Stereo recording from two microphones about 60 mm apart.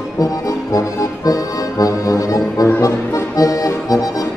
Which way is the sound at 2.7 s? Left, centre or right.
Left.